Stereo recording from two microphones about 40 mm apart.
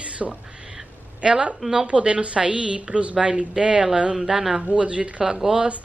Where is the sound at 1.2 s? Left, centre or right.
Right.